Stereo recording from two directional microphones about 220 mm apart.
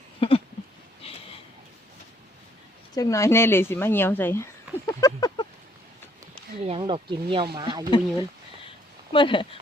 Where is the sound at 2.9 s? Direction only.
15° left (ahead or behind).